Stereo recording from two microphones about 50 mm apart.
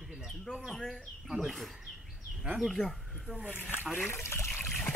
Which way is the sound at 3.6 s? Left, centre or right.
Left.